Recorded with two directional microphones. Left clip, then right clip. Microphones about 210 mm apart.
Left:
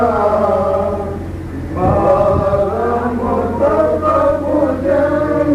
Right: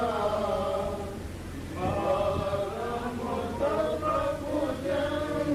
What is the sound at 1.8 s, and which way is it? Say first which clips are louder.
Chant: left 15 dB; 35° left (ahead or behind).